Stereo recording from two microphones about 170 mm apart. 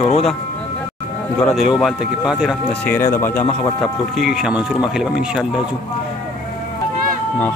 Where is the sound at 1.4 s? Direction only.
Centre (ahead or behind).